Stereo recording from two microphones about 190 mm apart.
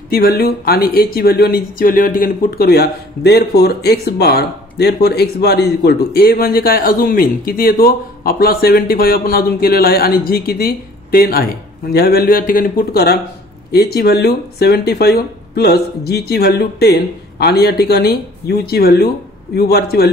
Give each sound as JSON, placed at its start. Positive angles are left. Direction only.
{"t": 0.1, "sound": "speech", "side_deg": 55}